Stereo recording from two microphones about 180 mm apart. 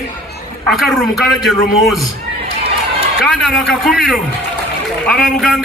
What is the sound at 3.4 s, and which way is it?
A man's voice, centre (ahead or behind).